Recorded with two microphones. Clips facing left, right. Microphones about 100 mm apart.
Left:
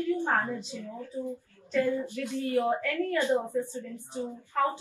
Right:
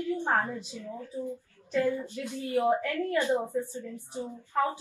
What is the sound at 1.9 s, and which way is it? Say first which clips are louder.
Speech: left 1 dB; 20° left (ahead or behind).